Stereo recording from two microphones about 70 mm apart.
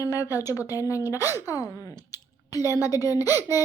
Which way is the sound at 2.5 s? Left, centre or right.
Left.